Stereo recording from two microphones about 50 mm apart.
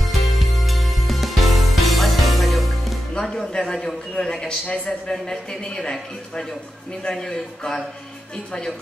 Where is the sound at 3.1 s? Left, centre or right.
Centre.